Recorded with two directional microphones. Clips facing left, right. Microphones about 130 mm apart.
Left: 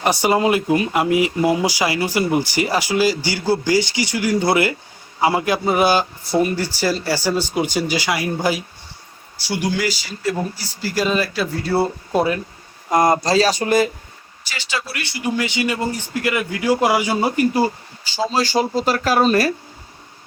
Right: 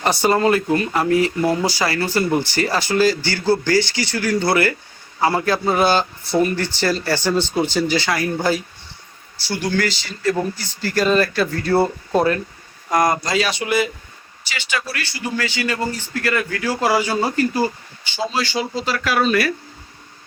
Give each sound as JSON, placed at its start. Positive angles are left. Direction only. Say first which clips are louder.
{"t": 0.0, "sound": "speech", "louder": "even", "side_deg": 10}
{"t": 12.9, "sound": "speech", "louder": "left 3 dB", "side_deg": 30}
{"t": 14.8, "sound": "a man's voice", "louder": "left 2 dB", "side_deg": 25}
{"t": 18.0, "sound": "speech", "louder": "left 3 dB", "side_deg": 35}